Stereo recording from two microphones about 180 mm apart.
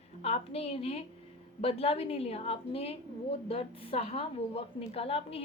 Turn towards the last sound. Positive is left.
turn(degrees=35)  # may be behind; listen again after turning